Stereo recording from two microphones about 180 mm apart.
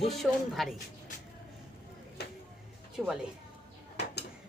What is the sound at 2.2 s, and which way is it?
Music, 65° left (ahead or behind).